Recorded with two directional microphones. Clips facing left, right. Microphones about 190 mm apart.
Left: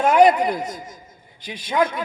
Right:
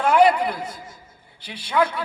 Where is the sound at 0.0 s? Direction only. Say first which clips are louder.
Left 2 dB; 15° left (ahead or behind).